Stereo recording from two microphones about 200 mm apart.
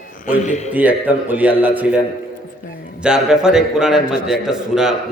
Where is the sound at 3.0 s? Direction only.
5° right (ahead or behind).